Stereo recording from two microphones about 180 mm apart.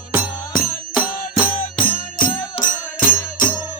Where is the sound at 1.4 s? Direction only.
50° left (ahead or behind).